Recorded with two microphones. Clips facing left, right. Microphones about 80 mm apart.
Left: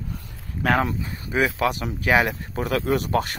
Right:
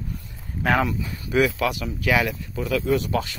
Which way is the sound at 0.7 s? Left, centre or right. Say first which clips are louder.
Even; left.